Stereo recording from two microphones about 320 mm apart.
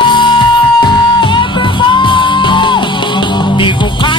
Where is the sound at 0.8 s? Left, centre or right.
Centre.